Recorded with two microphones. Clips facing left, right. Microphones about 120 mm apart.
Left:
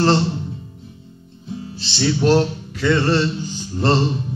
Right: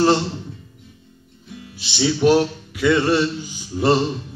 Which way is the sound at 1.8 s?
10° right (ahead or behind).